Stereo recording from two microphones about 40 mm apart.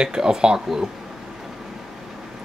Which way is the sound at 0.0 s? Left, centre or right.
Centre.